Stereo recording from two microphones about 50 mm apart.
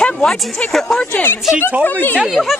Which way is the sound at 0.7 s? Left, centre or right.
Centre.